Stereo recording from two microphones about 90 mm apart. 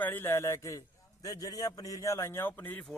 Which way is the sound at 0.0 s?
25° left (ahead or behind).